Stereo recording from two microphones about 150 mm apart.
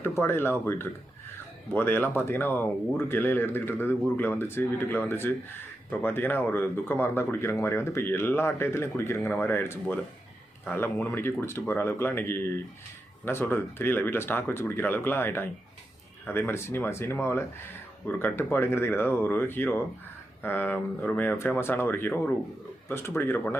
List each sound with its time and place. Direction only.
0.0 s speech: 15° left (ahead or behind)